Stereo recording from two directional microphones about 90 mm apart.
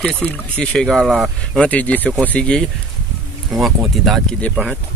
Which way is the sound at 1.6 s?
15° left (ahead or behind).